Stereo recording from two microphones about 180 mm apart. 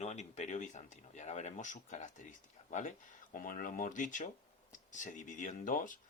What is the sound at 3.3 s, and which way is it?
Speech, 50° left (ahead or behind).